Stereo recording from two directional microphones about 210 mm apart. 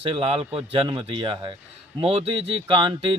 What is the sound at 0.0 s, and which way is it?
Speech, 25° right (ahead or behind).